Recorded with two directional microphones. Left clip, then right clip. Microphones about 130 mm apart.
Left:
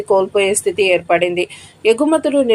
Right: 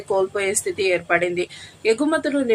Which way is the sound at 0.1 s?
15° left (ahead or behind).